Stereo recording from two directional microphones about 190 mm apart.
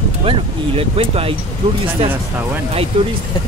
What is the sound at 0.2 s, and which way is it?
Speech, 30° right (ahead or behind).